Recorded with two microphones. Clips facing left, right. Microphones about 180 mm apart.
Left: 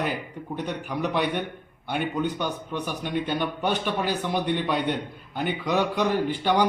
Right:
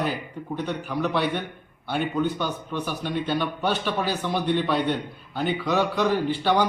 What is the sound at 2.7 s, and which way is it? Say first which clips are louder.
A man's voice: right 1 dB; 15° left (ahead or behind).